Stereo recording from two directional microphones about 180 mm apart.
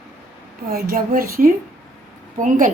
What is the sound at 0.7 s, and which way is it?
A woman's voice, 55° right (ahead or behind).